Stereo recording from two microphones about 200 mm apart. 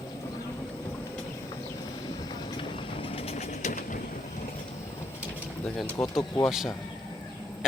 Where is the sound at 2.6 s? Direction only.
30° left (ahead or behind).